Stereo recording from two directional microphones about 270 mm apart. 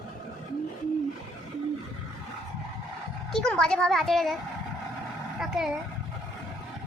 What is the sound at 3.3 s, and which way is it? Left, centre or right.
A woman's voice, centre.